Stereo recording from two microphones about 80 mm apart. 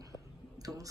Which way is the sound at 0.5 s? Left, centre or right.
Right.